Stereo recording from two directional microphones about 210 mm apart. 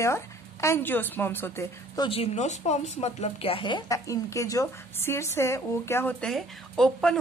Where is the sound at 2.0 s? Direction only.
30° left (ahead or behind); by 7.1 s centre (ahead or behind).